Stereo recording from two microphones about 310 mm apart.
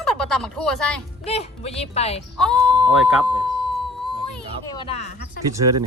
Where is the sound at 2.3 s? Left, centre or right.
Centre.